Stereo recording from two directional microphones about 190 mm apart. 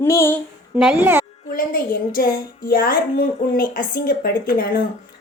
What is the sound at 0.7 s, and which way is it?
Speech, 5° right (ahead or behind).